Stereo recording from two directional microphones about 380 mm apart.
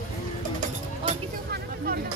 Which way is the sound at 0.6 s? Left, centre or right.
Right.